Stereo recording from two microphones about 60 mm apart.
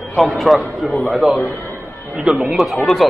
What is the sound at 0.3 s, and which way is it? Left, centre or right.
Speech, centre.